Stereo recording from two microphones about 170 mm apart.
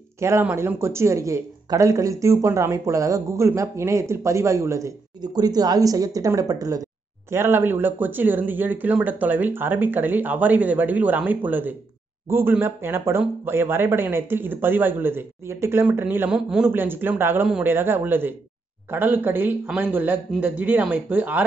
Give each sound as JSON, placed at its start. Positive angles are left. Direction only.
{"t": 0.2, "sound": "speech", "side_deg": -15}